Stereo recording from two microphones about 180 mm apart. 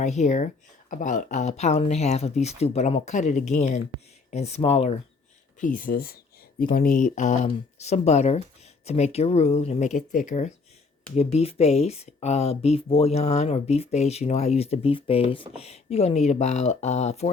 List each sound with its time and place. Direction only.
0.0 s speech: 40° left (ahead or behind)
5.5 s speech: 45° left (ahead or behind)